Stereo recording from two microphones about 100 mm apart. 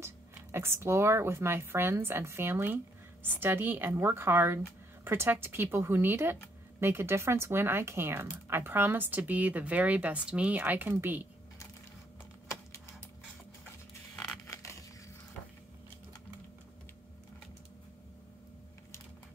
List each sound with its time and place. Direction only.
0.0 s speech: 25° right (ahead or behind)
14.1 s crushing: 10° left (ahead or behind)
14.5 s crushing: 30° left (ahead or behind)